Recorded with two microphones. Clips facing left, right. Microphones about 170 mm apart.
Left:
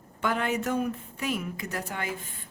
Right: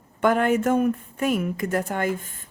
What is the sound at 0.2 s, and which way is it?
Speech, 50° right (ahead or behind).